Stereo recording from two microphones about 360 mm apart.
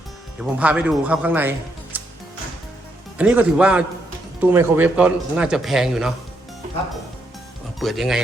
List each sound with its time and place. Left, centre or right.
0.6 s speech: centre
3.2 s speech: centre
7.8 s speech: centre